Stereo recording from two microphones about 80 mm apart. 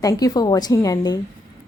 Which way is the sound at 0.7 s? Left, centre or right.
Left.